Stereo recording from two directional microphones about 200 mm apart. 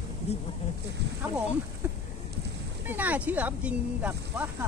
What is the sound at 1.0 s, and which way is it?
Speech, 55° right (ahead or behind).